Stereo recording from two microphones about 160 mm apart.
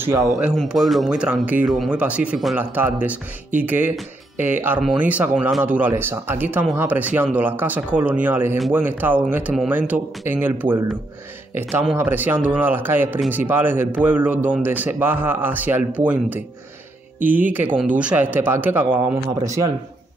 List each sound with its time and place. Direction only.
0.0 s speech: 20° right (ahead or behind)
0.4 s speech: 5° right (ahead or behind)
17.2 s speech: 60° right (ahead or behind)
17.5 s speech: 10° right (ahead or behind)